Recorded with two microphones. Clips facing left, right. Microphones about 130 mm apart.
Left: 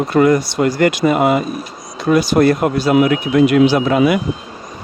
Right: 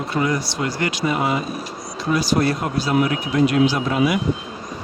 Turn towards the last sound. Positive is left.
turn(degrees=70)  # may be behind; listen again after turning